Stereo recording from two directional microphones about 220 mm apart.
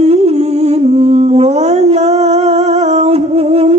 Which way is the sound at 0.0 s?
25° right (ahead or behind).